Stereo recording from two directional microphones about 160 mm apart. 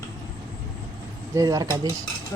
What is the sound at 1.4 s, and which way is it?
Speech, 20° right (ahead or behind).